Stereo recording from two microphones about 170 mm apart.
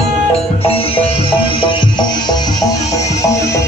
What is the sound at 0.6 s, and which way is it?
Music, 35° left (ahead or behind).